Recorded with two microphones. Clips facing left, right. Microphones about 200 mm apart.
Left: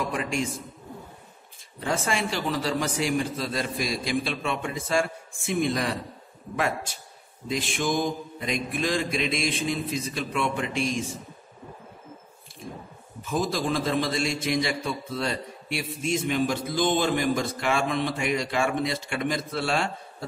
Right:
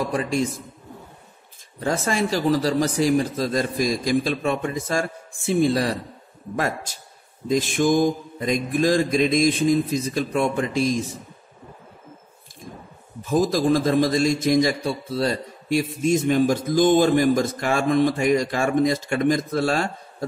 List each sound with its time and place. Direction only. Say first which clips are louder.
0.0 s a man's voice: right 5 dB; 35° right (ahead or behind)
1.8 s a man's voice: right 4 dB; 40° right (ahead or behind)
13.2 s a man's voice: right 7 dB; 40° right (ahead or behind)